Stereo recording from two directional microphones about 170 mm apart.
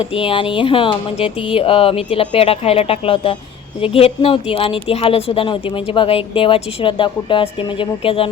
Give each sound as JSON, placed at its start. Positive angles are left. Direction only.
{"t": 0.0, "sound": "speech", "side_deg": 30}